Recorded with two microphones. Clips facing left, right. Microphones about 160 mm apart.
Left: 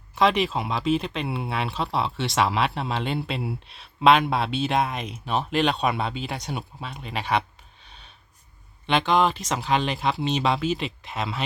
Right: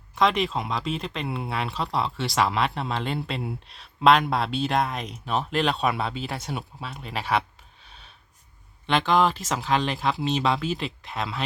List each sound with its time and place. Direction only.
0.2 s speech: 5° left (ahead or behind)
7.9 s a sound: 5° right (ahead or behind)
8.9 s speech: centre (ahead or behind)